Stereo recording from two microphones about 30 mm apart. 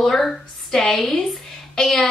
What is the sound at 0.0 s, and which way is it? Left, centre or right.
Speech, centre.